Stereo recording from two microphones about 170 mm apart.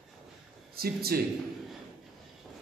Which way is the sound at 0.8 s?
65° right (ahead or behind).